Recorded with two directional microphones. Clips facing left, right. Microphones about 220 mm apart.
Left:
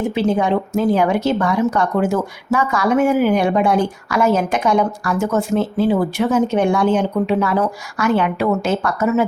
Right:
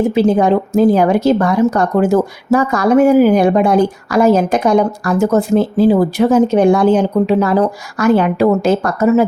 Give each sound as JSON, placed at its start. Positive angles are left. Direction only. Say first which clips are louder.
{"t": 0.1, "sound": "speech", "louder": "right 5 dB", "side_deg": -40}